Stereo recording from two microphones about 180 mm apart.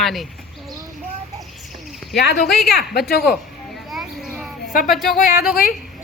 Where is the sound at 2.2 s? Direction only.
65° left (ahead or behind).